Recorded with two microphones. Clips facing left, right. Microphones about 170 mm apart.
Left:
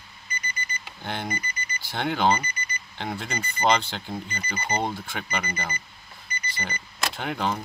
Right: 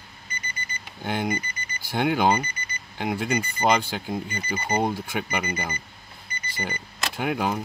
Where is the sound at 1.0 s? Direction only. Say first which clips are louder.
Right 5 dB; 15° right (ahead or behind).